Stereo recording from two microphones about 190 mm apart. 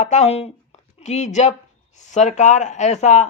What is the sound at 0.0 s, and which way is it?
Speech, 35° left (ahead or behind).